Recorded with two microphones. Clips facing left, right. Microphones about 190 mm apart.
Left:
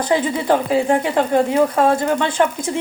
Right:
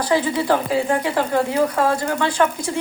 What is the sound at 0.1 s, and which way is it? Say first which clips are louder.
A woman's voice: left 1 dB; 20° left (ahead or behind).